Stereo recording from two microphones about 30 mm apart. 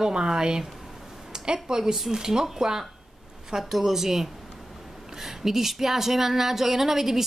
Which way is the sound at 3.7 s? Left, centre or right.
Centre.